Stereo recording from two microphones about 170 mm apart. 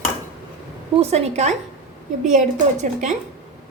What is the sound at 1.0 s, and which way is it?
A woman's voice, 40° right (ahead or behind).